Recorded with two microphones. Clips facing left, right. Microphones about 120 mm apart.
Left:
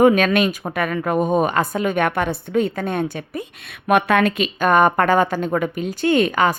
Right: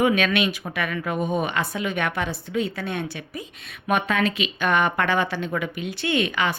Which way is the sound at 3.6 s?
70° left (ahead or behind).